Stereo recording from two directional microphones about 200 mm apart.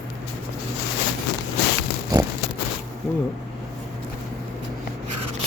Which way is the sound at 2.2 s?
20° right (ahead or behind).